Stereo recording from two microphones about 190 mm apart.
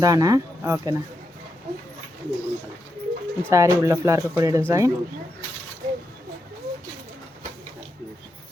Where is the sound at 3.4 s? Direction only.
15° right (ahead or behind).